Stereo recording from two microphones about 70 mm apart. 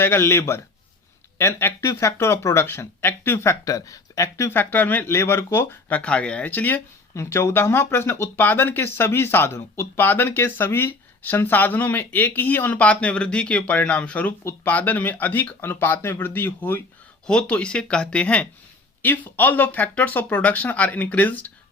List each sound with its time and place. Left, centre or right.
0.0 s speech: left
4.4 s speech: left
6.0 s speech: centre
6.5 s speech: left
7.1 s speech: left
17.2 s speech: centre
19.0 s speech: left